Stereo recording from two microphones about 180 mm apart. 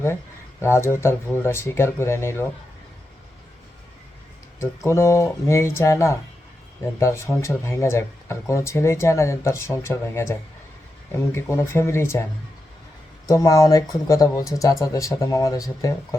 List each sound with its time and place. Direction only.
0.6 s speech: 15° left (ahead or behind)
4.6 s speech: 15° left (ahead or behind)
13.2 s speech: 20° left (ahead or behind)